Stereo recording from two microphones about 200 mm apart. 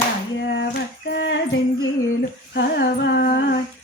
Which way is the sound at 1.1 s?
60° left (ahead or behind).